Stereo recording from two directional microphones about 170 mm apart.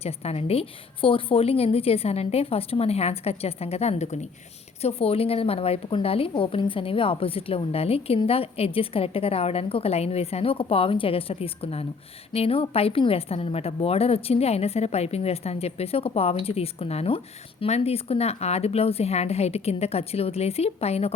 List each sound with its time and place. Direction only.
0.0 s a woman's voice: 35° left (ahead or behind)